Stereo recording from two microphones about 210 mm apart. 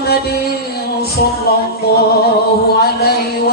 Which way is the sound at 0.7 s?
45° left (ahead or behind).